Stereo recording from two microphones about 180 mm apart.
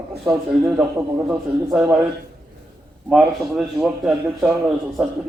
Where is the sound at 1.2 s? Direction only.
5° right (ahead or behind).